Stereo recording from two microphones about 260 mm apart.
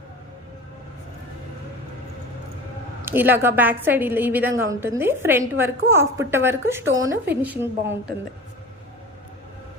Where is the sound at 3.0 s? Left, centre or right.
Centre.